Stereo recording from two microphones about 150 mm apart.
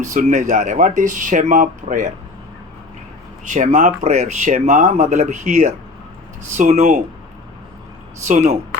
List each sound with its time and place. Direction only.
0.0 s speech: 55° right (ahead or behind)
3.4 s speech: 55° right (ahead or behind)
8.3 s speech: 50° right (ahead or behind)